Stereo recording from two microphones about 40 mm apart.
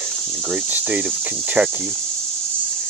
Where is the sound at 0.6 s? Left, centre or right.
Right.